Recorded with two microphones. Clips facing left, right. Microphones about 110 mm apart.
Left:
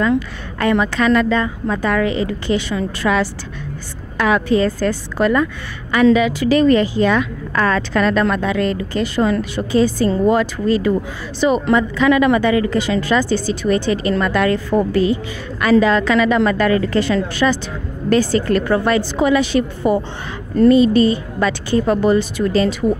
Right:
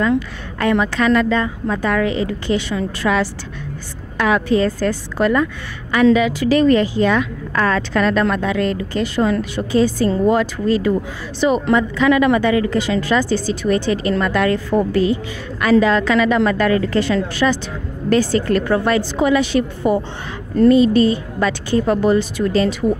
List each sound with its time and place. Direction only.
0.6 s a woman's voice: 25° left (ahead or behind)
10.9 s a woman's voice: 35° left (ahead or behind)